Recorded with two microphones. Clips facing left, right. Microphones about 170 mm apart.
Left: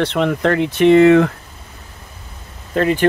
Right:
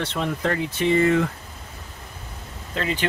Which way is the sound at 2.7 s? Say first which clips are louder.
Left 10 dB; 50° left (ahead or behind).